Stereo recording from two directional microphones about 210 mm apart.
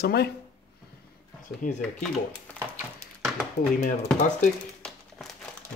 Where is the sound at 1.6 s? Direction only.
40° left (ahead or behind).